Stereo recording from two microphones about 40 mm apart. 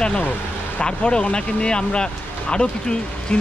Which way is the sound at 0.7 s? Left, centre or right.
Left.